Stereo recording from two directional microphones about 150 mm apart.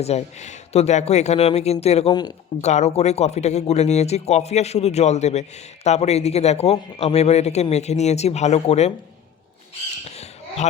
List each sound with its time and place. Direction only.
0.0 s speech: 45° left (ahead or behind)
10.2 s basketball bounce: 45° left (ahead or behind)